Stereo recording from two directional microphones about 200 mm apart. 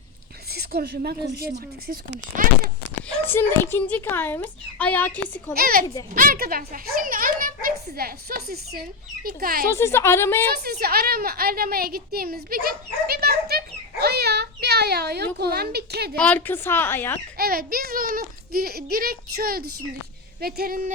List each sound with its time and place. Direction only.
0.8 s a child's voice: 50° right (ahead or behind)
3.1 s a child's voice: 10° left (ahead or behind)
5.5 s a child's voice: 50° right (ahead or behind)
9.6 s a child's voice: 15° left (ahead or behind)
10.6 s a woman's voice: 50° right (ahead or behind)
16.1 s a child's voice: 5° left (ahead or behind)
17.3 s a child's voice: 50° right (ahead or behind)